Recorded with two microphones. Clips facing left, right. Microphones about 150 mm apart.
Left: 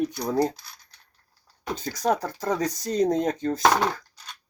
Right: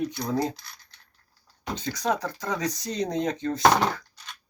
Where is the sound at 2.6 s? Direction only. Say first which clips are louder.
Left 7 dB; 50° left (ahead or behind).